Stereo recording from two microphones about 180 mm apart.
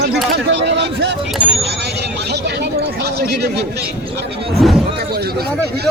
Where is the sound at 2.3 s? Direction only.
65° right (ahead or behind).